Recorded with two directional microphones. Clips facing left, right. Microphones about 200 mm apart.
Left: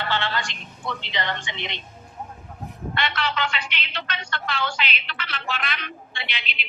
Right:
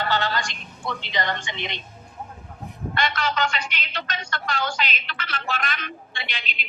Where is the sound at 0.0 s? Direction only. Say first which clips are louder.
Right 2 dB; 40° right (ahead or behind).